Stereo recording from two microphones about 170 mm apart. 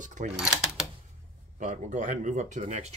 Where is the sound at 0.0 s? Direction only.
45° right (ahead or behind).